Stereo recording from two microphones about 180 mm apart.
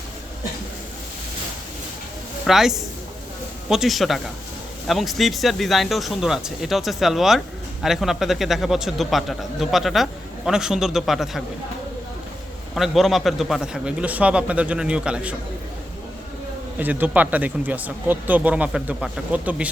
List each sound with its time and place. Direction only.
2.5 s speech: centre (ahead or behind)
12.7 s speech: centre (ahead or behind)
16.7 s speech: 10° right (ahead or behind)